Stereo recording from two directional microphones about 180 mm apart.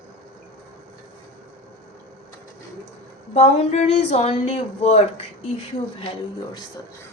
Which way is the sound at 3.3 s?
35° left (ahead or behind).